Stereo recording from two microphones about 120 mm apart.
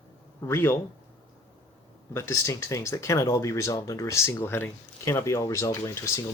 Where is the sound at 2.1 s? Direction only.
25° left (ahead or behind).